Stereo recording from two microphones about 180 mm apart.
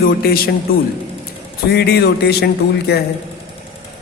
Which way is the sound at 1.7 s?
65° left (ahead or behind).